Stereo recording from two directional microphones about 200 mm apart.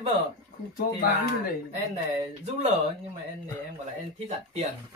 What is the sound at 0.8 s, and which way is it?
Speech, 45° left (ahead or behind).